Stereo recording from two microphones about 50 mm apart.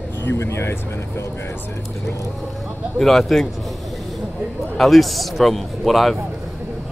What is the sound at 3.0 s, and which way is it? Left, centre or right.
Speech, centre.